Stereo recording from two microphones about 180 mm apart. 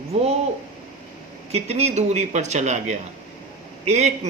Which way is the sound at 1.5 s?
35° right (ahead or behind).